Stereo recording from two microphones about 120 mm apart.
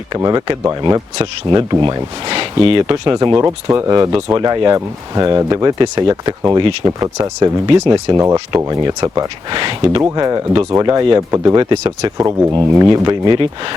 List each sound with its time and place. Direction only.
0.2 s speech: 35° right (ahead or behind)
7.7 s speech: 40° right (ahead or behind)
12.2 s speech: 25° right (ahead or behind)
12.9 s speech: 40° right (ahead or behind)